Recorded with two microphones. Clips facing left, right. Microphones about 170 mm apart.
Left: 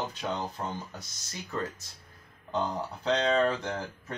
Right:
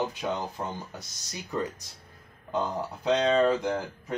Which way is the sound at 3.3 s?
15° right (ahead or behind).